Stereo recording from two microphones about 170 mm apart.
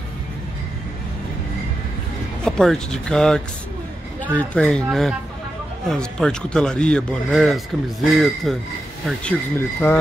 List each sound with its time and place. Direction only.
2.4 s speech: 5° left (ahead or behind)